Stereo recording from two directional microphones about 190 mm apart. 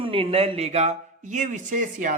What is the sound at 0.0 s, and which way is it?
A woman's voice, 30° right (ahead or behind).